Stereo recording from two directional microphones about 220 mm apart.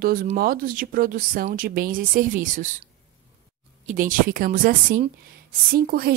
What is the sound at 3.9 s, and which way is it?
A woman's voice, 35° right (ahead or behind).